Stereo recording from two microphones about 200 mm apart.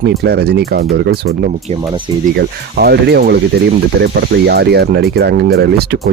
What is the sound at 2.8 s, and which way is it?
Speech, 55° right (ahead or behind).